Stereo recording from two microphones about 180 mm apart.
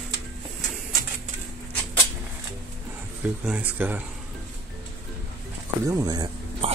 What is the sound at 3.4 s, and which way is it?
Speech, 10° right (ahead or behind).